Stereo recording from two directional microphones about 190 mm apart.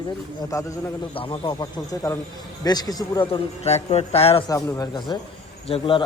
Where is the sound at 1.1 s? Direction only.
30° left (ahead or behind).